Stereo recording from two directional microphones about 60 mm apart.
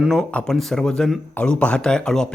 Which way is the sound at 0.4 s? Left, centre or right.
Centre.